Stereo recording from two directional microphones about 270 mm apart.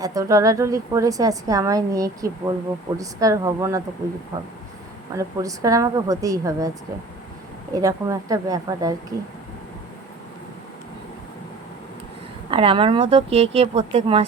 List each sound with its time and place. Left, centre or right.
0.0 s a woman's voice: centre
5.1 s a woman's voice: centre
7.7 s a woman's voice: centre
12.5 s speech: centre